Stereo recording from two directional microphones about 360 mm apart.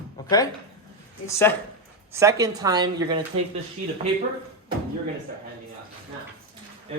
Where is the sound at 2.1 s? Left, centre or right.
Centre.